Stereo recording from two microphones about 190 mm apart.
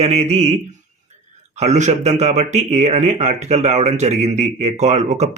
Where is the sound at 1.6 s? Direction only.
35° right (ahead or behind).